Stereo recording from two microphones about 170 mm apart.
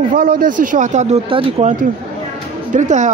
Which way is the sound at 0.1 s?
60° right (ahead or behind).